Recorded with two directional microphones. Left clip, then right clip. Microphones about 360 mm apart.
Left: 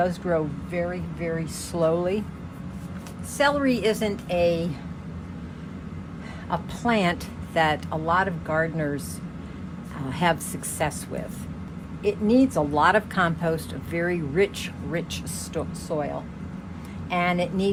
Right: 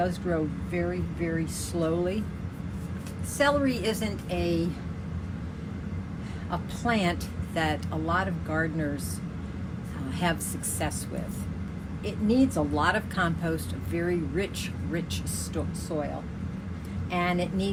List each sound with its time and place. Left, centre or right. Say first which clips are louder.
0.0 s speech: left 4 dB; centre
3.3 s speech: left 3 dB; left
6.5 s speech: left 4 dB; centre
10.1 s speech: left 6 dB; left
12.0 s speech: left 5 dB; centre
17.1 s speech: left 4 dB; centre